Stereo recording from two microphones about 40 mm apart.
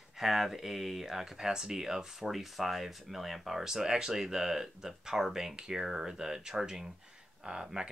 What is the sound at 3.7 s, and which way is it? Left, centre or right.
Speech, centre.